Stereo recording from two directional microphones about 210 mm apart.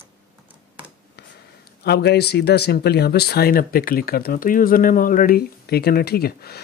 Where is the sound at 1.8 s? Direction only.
50° left (ahead or behind).